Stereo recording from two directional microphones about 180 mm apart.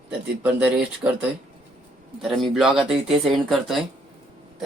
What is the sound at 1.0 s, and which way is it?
Speech, 15° right (ahead or behind).